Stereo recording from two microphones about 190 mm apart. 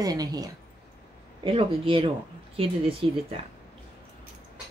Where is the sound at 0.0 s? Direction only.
20° right (ahead or behind).